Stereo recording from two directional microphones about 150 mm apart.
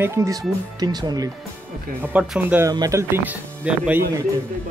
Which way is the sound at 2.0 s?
10° right (ahead or behind).